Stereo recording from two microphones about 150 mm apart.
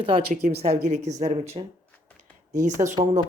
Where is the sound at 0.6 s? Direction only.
50° right (ahead or behind).